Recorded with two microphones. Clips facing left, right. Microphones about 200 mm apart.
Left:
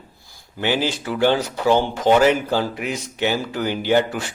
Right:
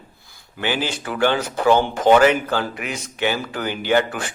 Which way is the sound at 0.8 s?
55° right (ahead or behind).